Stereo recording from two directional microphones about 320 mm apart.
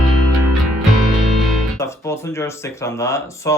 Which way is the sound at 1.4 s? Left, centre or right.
Centre.